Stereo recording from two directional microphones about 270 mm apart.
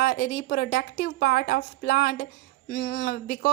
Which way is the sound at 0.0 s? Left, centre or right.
Left.